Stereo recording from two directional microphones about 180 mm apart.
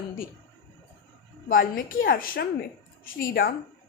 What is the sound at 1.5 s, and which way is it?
A woman's voice, 50° left (ahead or behind).